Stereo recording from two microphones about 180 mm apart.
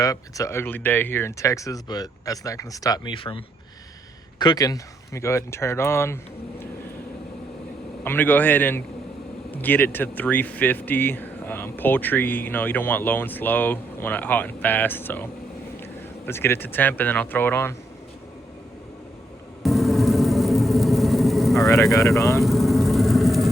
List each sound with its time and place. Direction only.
0.0 s speech: 20° left (ahead or behind)
8.0 s speech: 10° left (ahead or behind)
19.6 s vehicle: centre (ahead or behind)
21.7 s speech: 15° left (ahead or behind)
22.4 s a sound: centre (ahead or behind)